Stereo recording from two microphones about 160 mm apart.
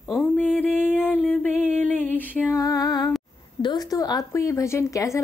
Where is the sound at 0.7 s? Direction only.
5° right (ahead or behind).